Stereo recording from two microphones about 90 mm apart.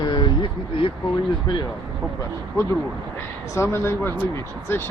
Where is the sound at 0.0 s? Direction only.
55° left (ahead or behind).